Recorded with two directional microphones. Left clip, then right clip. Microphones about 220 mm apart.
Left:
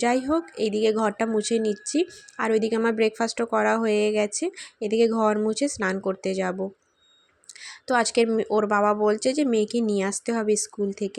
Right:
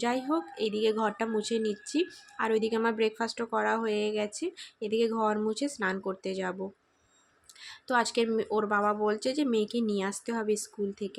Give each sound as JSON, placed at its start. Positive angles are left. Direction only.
{"t": 0.0, "sound": "a woman's voice", "side_deg": 25}
{"t": 7.6, "sound": "a woman's voice", "side_deg": 25}